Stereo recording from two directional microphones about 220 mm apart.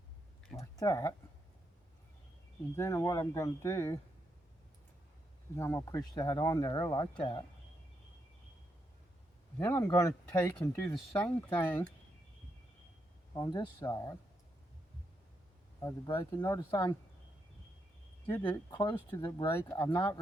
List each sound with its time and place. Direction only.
0.8 s speech: 15° left (ahead or behind)
2.7 s speech: 10° left (ahead or behind)
5.5 s speech: 15° left (ahead or behind)
9.6 s speech: 10° left (ahead or behind)
13.3 s speech: 20° left (ahead or behind)
15.8 s speech: 15° left (ahead or behind)
18.3 s speech: 10° left (ahead or behind)
18.7 s speech: 20° left (ahead or behind)